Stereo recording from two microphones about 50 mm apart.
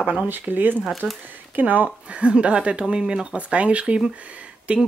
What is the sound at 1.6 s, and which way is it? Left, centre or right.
Speech, right.